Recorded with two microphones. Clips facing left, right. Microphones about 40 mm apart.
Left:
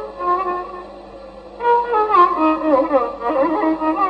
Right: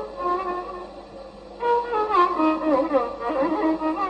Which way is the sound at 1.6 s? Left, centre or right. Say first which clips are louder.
Left 6 dB; centre.